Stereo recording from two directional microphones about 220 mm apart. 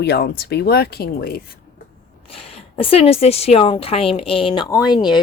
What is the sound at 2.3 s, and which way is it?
Speech, 25° left (ahead or behind).